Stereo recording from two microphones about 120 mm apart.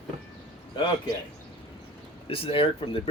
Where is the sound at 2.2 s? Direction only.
50° left (ahead or behind).